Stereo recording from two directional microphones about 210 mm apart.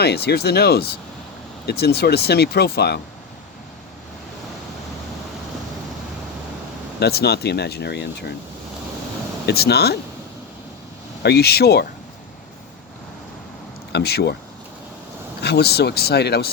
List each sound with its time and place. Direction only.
0.0 s speech: 50° left (ahead or behind)
7.0 s speech: 50° left (ahead or behind)
9.5 s speech: 50° left (ahead or behind)
11.2 s speech: 50° left (ahead or behind)
13.9 s speech: 50° left (ahead or behind)
15.4 s speech: 50° left (ahead or behind)